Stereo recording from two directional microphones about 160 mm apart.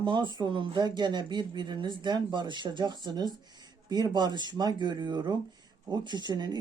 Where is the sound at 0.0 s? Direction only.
30° right (ahead or behind).